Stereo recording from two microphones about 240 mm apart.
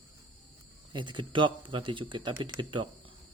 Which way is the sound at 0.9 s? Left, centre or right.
Centre.